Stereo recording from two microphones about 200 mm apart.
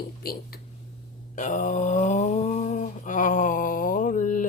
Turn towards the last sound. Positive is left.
turn(degrees=40)  # may be behind; listen again after turning